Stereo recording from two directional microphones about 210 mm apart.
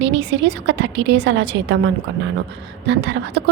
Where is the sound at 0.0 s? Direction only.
55° right (ahead or behind).